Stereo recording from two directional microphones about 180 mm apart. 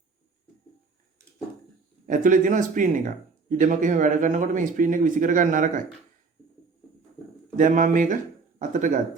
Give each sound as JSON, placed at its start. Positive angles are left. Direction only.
{"t": 2.0, "sound": "speech", "side_deg": -45}
{"t": 7.5, "sound": "speech", "side_deg": -45}